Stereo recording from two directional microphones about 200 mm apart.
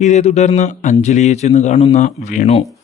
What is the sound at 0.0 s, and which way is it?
A man's voice, 35° left (ahead or behind).